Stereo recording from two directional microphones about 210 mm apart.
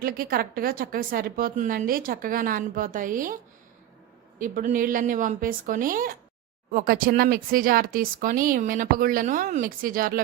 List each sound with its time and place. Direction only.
0.0 s a woman's voice: 45° right (ahead or behind)
4.4 s speech: 40° right (ahead or behind)